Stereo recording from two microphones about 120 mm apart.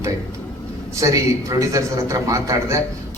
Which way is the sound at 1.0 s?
25° right (ahead or behind).